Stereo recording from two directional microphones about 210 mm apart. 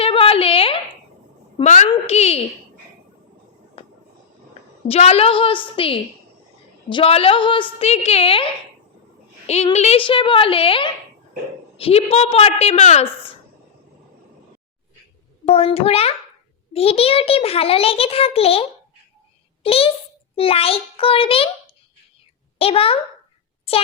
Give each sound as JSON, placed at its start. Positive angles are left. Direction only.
{"t": 0.0, "sound": "a sound", "side_deg": 25}
{"t": 1.9, "sound": "speech", "side_deg": 30}
{"t": 4.9, "sound": "a child's voice", "side_deg": 30}
{"t": 9.5, "sound": "a child's voice", "side_deg": 30}
{"t": 15.5, "sound": "a child's voice", "side_deg": 30}
{"t": 22.5, "sound": "a child's voice", "side_deg": 25}
{"t": 23.7, "sound": "a sound", "side_deg": 25}